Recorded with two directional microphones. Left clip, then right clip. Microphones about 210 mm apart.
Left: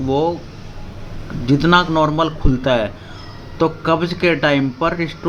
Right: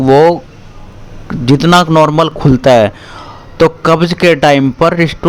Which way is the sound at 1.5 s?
45° right (ahead or behind).